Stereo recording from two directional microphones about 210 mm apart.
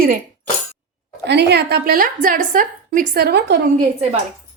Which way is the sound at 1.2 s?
55° right (ahead or behind).